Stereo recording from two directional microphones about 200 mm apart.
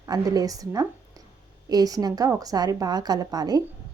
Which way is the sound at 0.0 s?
20° right (ahead or behind).